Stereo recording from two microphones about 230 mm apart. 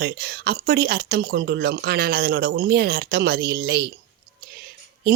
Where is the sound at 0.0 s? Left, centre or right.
Right.